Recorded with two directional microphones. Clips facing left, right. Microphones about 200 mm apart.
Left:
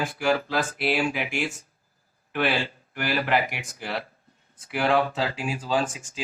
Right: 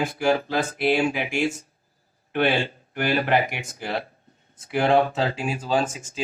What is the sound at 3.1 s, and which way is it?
Speech, 25° right (ahead or behind).